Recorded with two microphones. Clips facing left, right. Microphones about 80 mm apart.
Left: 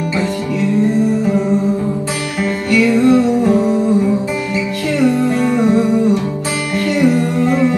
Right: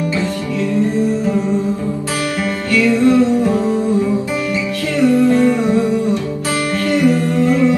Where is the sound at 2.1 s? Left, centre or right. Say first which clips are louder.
Even; left.